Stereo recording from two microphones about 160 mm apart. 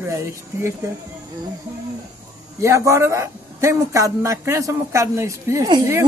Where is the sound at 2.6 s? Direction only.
20° right (ahead or behind).